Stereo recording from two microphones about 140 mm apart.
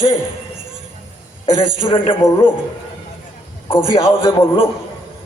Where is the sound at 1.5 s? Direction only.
40° left (ahead or behind).